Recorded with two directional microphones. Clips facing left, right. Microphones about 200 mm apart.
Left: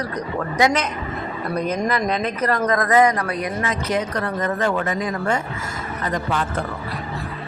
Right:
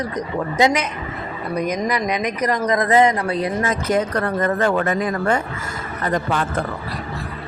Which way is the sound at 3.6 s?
50° right (ahead or behind).